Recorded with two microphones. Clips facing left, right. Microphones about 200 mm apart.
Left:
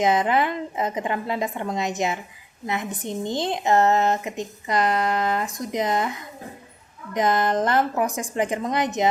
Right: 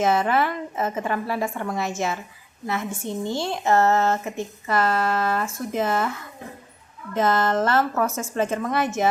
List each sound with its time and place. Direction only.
0.0 s speech: 15° left (ahead or behind)